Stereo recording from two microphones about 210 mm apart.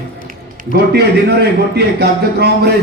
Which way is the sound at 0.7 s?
50° right (ahead or behind).